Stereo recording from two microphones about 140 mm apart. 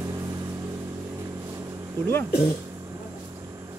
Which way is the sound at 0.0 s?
25° right (ahead or behind).